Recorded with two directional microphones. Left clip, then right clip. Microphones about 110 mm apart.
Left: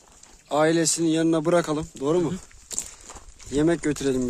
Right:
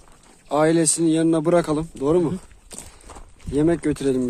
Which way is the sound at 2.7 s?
80° left.